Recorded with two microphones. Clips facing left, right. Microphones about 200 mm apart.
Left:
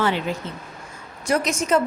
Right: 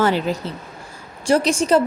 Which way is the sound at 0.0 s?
35° right (ahead or behind).